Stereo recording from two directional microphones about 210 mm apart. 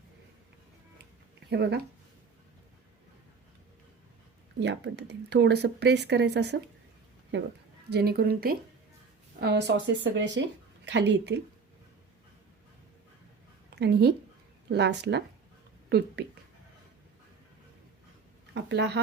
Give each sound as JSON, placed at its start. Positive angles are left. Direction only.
{"t": 1.5, "sound": "speech", "side_deg": -55}
{"t": 4.6, "sound": "speech", "side_deg": -55}
{"t": 7.9, "sound": "speech", "side_deg": -50}
{"t": 13.7, "sound": "speech", "side_deg": -50}
{"t": 18.5, "sound": "speech", "side_deg": -55}